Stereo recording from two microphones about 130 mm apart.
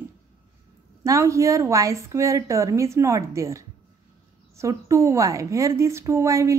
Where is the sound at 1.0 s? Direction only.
25° right (ahead or behind).